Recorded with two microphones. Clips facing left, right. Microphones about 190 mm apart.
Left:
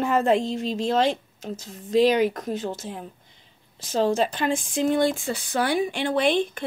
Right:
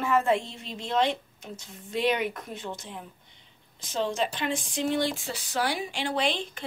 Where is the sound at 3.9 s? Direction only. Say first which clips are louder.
Left 6 dB; 45° left (ahead or behind).